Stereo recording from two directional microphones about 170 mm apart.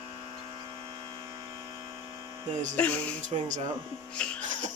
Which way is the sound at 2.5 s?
45° right (ahead or behind).